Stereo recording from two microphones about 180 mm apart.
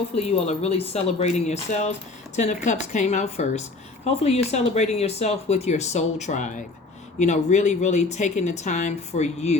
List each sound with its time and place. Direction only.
0.2 s speech: 35° left (ahead or behind)